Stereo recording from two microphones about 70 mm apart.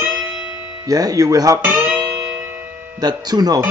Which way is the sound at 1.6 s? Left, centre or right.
Right.